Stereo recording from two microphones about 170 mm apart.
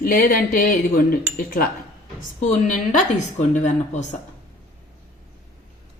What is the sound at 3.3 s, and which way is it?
Speech, 45° left (ahead or behind).